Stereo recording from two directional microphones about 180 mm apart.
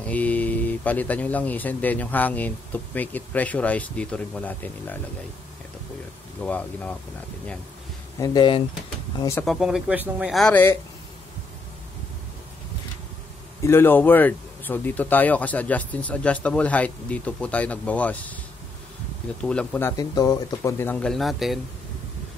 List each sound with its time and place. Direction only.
0.0 s speech: 10° left (ahead or behind)
6.4 s speech: 5° left (ahead or behind)
8.2 s speech: 25° left (ahead or behind)
9.4 s speech: centre (ahead or behind)
13.7 s speech: 10° left (ahead or behind)
19.4 s speech: 5° left (ahead or behind)
20.0 s speech: 20° left (ahead or behind); by 21.5 s centre (ahead or behind)